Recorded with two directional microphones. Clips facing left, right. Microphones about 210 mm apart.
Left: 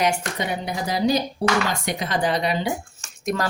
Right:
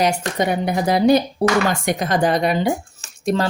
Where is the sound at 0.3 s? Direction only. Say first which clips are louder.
Right 7 dB; 50° right (ahead or behind).